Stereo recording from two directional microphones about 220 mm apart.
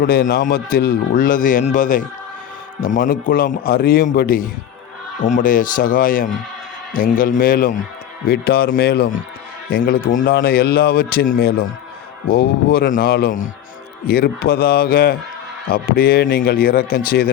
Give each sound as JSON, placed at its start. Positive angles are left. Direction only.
{"t": 0.0, "sound": "speech", "side_deg": 40}